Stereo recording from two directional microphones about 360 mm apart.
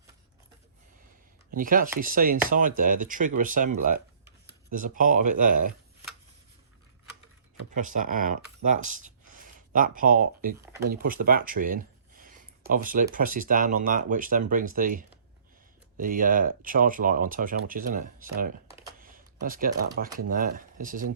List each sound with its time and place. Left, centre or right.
1.5 s speech: right
7.8 s speech: right
19.0 s a sound: right
20.1 s speech: right